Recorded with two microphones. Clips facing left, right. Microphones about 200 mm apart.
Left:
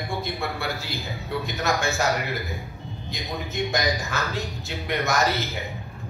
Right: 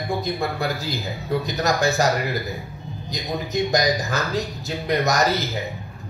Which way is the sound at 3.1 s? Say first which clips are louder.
Right 6 dB; 40° right (ahead or behind).